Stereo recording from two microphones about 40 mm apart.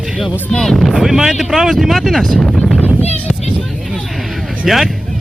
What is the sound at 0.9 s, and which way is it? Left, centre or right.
Speech, centre.